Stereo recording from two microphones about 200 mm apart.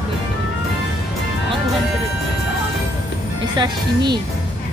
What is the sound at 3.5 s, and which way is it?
Speech, 20° right (ahead or behind).